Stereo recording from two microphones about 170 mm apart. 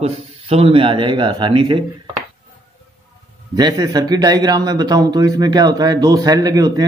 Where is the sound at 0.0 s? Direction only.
35° right (ahead or behind).